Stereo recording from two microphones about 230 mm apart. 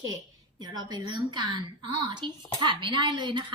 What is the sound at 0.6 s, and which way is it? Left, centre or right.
A woman's voice, centre.